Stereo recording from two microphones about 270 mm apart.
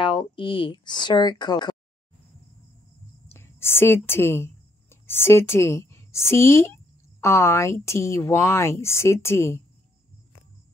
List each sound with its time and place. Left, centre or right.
0.0 s speech: centre
3.3 s speech: centre